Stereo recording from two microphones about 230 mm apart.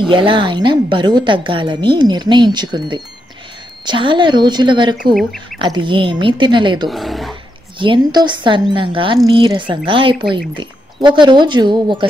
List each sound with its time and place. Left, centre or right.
0.1 s a woman's voice: right
5.1 s speech: centre
5.6 s a woman's voice: right
6.9 s speech: centre
7.8 s a woman's voice: centre